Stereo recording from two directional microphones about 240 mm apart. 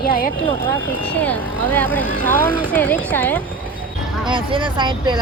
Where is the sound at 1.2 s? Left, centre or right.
Centre.